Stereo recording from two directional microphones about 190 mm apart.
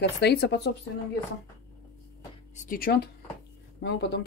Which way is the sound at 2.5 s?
45° left (ahead or behind).